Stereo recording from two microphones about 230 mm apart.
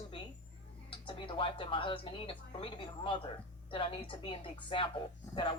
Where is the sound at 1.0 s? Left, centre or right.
Left.